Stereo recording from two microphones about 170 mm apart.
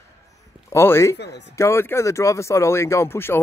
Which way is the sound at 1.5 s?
15° left (ahead or behind).